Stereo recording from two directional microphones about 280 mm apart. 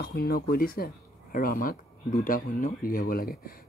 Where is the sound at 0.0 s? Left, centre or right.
Left.